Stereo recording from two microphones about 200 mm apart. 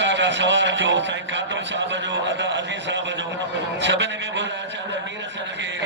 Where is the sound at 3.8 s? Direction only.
65° right (ahead or behind).